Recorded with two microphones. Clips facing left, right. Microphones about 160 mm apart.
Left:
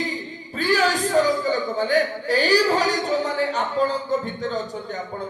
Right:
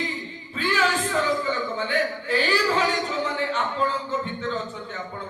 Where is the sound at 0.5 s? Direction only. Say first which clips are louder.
Left 3 dB; 40° left (ahead or behind).